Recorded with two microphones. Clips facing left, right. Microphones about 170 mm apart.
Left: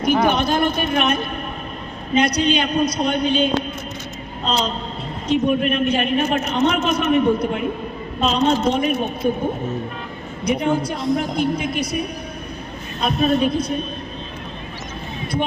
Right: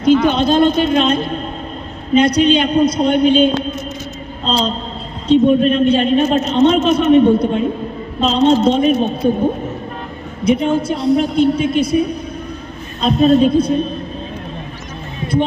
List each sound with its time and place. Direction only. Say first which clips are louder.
0.0 s a man's voice: right 5 dB; 25° right (ahead or behind)
10.4 s a man's voice: right 5 dB; 25° right (ahead or behind)